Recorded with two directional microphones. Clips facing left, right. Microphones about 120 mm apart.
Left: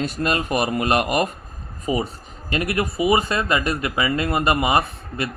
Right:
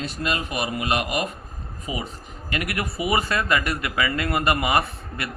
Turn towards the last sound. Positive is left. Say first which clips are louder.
# left 4 dB
turn(degrees=25)  # may be behind; listen again after turning